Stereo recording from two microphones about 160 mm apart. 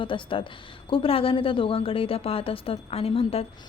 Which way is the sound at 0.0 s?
30° left (ahead or behind).